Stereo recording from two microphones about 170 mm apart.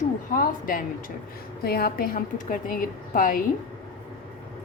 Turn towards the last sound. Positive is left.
turn(degrees=55)  # may be behind; listen again after turning